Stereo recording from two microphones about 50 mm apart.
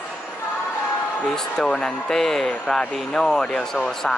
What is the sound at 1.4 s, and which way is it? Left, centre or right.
Speech, centre.